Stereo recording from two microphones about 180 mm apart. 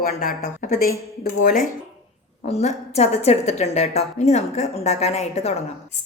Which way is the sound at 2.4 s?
40° left (ahead or behind).